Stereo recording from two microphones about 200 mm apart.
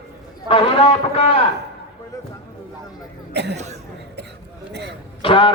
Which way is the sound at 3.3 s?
55° right (ahead or behind).